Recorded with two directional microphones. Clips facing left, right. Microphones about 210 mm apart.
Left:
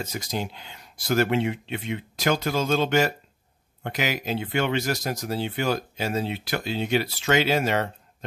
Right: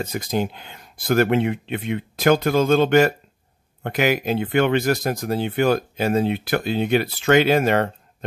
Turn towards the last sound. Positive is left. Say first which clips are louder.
# right 6 dB
turn(degrees=-55)  # may be behind; listen again after turning